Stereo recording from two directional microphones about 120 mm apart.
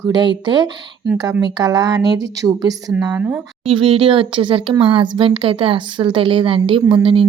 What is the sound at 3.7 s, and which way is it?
Speech, 50° right (ahead or behind).